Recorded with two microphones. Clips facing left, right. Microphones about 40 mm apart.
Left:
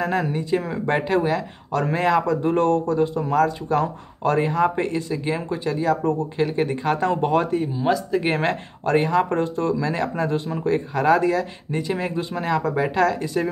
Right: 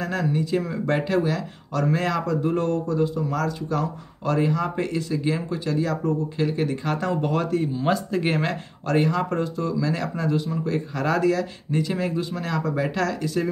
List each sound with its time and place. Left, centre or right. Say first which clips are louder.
0.0 s speech: left 2 dB; left
2.4 s speech: left 4 dB; left
7.6 s speech: left 2 dB; centre
8.3 s speech: left 3 dB; left
9.3 s speech: left 3 dB; left